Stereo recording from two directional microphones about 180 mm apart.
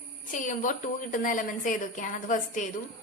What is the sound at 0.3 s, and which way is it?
A woman's voice, 45° left (ahead or behind).